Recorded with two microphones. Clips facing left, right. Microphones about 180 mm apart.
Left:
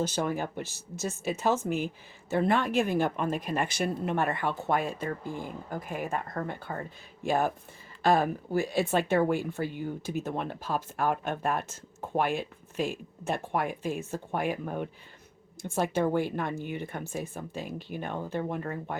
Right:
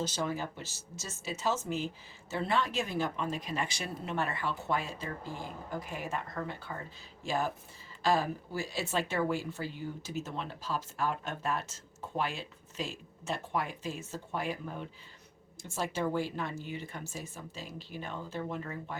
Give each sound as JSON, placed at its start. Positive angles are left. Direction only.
{"t": 0.0, "sound": "speech", "side_deg": 55}